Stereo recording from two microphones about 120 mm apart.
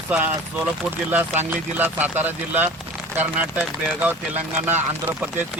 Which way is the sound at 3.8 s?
15° right (ahead or behind).